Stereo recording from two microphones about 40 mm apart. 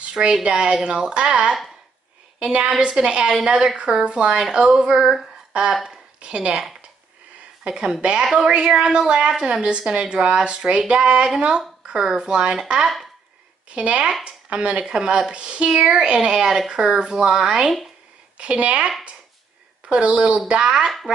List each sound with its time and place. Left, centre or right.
0.1 s a woman's voice: centre
1.1 s a woman's voice: right; by 5.3 s centre
6.2 s speech: right
7.6 s a woman's voice: centre
13.7 s speech: right
18.4 s speech: right
19.9 s speech: right